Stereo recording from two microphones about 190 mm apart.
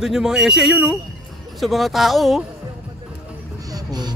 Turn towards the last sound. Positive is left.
turn(degrees=-20)  # may be behind; listen again after turning